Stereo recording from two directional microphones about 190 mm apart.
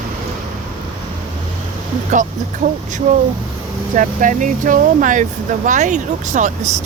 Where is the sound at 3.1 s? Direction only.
35° right (ahead or behind).